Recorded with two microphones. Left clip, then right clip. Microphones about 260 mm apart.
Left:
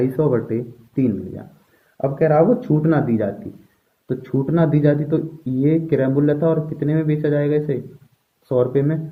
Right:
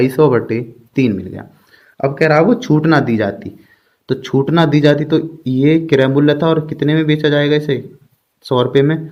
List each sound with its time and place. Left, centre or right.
0.2 s a man's voice: right